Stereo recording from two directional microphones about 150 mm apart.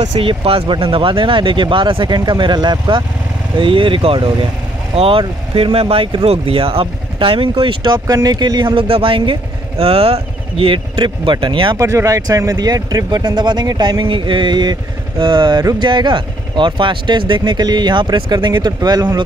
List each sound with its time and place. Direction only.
0.1 s speech: 35° right (ahead or behind)
11.8 s speech: 20° right (ahead or behind)